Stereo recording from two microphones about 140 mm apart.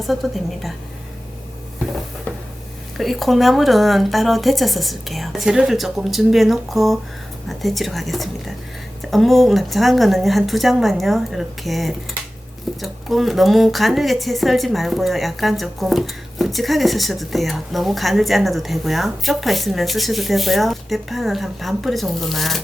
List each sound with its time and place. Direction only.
0.0 s speech: centre (ahead or behind)
3.0 s speech: centre (ahead or behind)